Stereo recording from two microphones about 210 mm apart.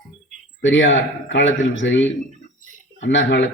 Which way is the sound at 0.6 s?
60° left (ahead or behind).